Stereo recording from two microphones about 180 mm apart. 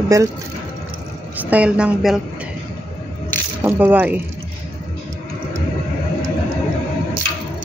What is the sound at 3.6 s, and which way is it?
Speech, 10° right (ahead or behind).